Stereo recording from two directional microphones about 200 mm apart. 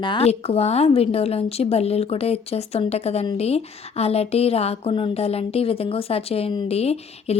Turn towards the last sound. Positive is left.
turn(degrees=30)  # may be behind; listen again after turning